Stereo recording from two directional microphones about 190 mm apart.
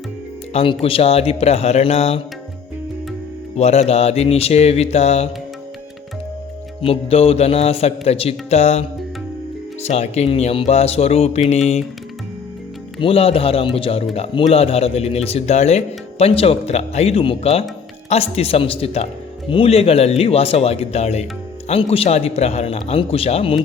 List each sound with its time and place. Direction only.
0.5 s speech: 30° left (ahead or behind)
3.6 s speech: 35° left (ahead or behind)
6.8 s speech: 30° left (ahead or behind)
13.0 s speech: 30° left (ahead or behind)